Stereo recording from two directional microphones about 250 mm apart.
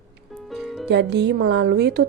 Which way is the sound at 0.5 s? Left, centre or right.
Centre.